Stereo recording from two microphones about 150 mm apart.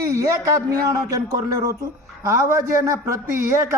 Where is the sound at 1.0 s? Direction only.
20° right (ahead or behind).